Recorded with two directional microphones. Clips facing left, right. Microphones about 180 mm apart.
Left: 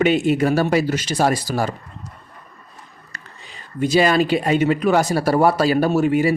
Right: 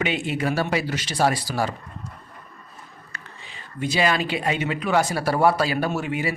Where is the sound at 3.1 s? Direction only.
40° left (ahead or behind).